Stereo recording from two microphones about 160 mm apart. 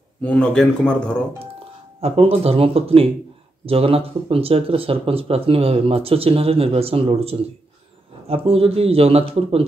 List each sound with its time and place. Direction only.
0.2 s speech: 5° left (ahead or behind)
2.0 s speech: 35° right (ahead or behind)